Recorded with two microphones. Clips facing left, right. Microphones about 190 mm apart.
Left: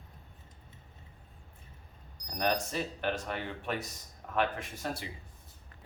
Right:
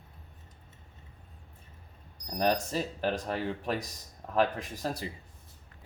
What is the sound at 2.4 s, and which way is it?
Speech, 35° right (ahead or behind).